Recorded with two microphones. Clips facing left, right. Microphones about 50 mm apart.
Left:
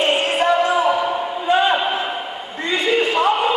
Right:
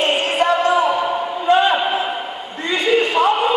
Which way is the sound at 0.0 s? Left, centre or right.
Centre.